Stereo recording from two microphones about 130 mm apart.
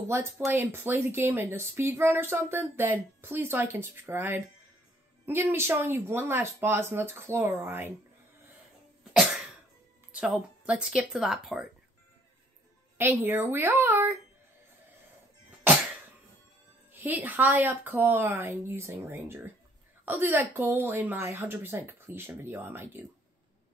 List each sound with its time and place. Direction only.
0.5 s speech: 15° right (ahead or behind)
9.1 s cough: 5° right (ahead or behind)
10.1 s speech: 10° right (ahead or behind)
12.9 s speech: 20° right (ahead or behind)
16.9 s speech: 15° right (ahead or behind)